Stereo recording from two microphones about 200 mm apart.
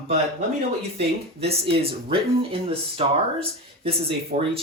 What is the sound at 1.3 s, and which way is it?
Speech, 30° right (ahead or behind).